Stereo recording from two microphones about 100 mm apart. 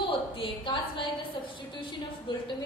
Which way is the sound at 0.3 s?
60° left (ahead or behind).